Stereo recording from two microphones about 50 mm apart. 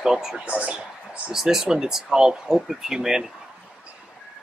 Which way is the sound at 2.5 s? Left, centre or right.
Centre.